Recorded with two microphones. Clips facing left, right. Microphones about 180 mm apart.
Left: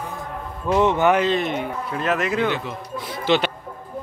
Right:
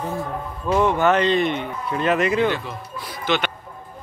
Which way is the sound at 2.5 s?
25° left (ahead or behind).